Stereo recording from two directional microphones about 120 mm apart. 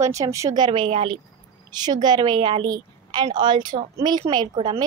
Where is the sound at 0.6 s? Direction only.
45° right (ahead or behind).